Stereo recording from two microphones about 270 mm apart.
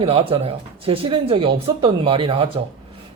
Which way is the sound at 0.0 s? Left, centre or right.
Right.